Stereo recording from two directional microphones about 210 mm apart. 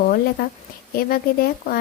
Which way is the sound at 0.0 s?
45° left (ahead or behind).